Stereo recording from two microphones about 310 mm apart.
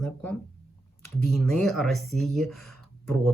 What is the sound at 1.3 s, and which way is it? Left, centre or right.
Speech, centre.